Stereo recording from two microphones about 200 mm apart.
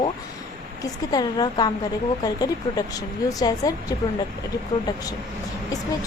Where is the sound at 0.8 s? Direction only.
20° left (ahead or behind).